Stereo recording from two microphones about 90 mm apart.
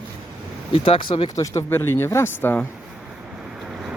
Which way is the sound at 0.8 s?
80° left.